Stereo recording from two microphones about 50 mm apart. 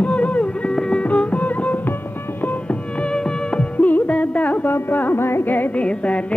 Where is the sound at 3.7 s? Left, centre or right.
Left.